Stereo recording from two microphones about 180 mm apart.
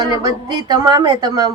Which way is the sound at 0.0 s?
20° right (ahead or behind).